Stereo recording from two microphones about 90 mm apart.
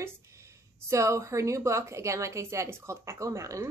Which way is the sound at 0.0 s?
30° right (ahead or behind).